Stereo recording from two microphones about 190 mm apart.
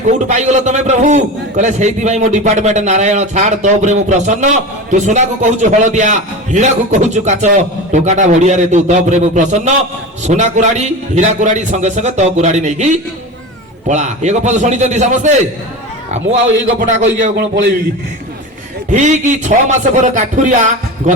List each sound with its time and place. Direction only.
0.3 s a man's voice: 40° right (ahead or behind)
16.8 s a man's voice: 35° right (ahead or behind)
17.3 s a man's voice: 60° right (ahead or behind)
18.9 s a man's voice: 40° right (ahead or behind)